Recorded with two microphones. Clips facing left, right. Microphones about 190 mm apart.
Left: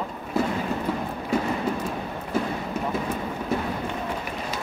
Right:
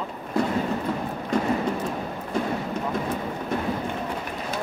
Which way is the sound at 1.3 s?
5° left (ahead or behind).